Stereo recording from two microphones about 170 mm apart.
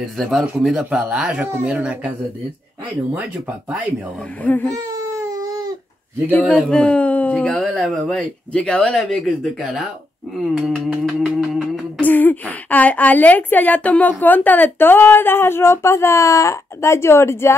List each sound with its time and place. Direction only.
0.0 s speech: centre (ahead or behind)
4.4 s a woman's voice: 10° left (ahead or behind)
5.1 s baby cry: 20° right (ahead or behind)
6.3 s speech: 10° left (ahead or behind)
10.5 s a sound: centre (ahead or behind)
12.0 s a woman's voice: 10° left (ahead or behind)